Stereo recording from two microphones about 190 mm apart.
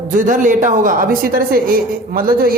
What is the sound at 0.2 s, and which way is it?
A woman's voice, 45° right (ahead or behind).